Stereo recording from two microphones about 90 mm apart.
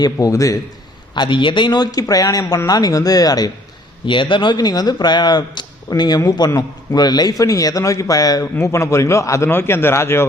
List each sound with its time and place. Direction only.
0.0 s a man's voice: 40° left (ahead or behind)
1.1 s speech: 60° left (ahead or behind); by 3.5 s 45° left (ahead or behind)
4.0 s a man's voice: 65° left (ahead or behind); by 10.2 s 30° left (ahead or behind)